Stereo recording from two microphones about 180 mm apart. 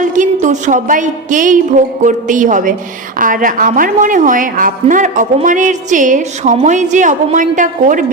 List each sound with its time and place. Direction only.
0.0 s a woman's voice: 45° right (ahead or behind)